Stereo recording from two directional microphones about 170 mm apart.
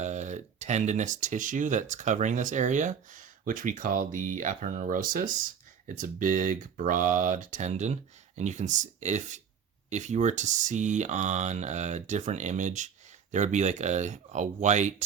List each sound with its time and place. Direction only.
0.0 s speech: 45° right (ahead or behind)